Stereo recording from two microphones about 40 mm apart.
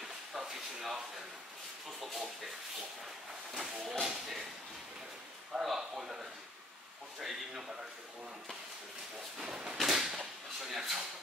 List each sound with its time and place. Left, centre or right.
0.0 s a sound: centre
1.9 s speech: centre
4.0 s speech: centre
5.5 s speech: centre
9.4 s speech: centre